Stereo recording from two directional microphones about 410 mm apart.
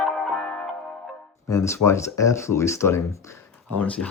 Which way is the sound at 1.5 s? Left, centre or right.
Centre.